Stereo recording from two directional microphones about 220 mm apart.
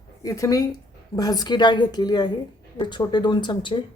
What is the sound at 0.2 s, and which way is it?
A woman's voice, 15° left (ahead or behind).